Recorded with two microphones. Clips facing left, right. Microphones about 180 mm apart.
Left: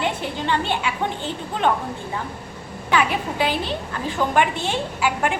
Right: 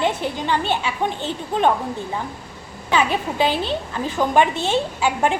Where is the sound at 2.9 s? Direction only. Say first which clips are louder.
Right 1 dB; 20° right (ahead or behind).